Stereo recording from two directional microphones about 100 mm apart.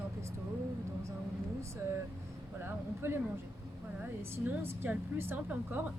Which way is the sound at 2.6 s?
25° right (ahead or behind).